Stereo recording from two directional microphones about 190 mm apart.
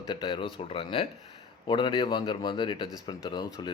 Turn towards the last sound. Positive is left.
turn(degrees=20)  # may be behind; listen again after turning